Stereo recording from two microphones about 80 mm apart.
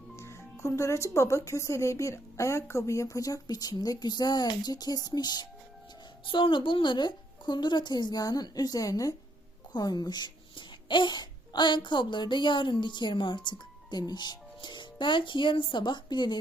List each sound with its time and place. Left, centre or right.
0.2 s speech: left
6.2 s a woman's voice: left
9.7 s a child's voice: left